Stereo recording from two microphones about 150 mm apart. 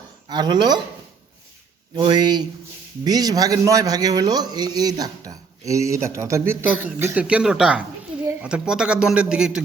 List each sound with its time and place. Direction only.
0.3 s speech: 30° right (ahead or behind)
2.0 s speech: 30° right (ahead or behind); by 9.6 s 5° right (ahead or behind)